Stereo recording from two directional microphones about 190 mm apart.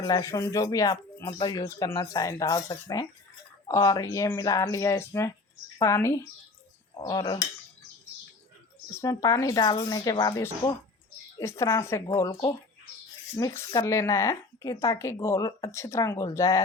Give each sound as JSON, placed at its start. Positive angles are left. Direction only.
{"t": 0.0, "sound": "speech", "side_deg": 20}
{"t": 9.0, "sound": "speech", "side_deg": 15}